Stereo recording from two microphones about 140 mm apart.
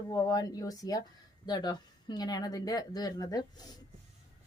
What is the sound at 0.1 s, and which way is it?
A woman's voice, 25° left (ahead or behind).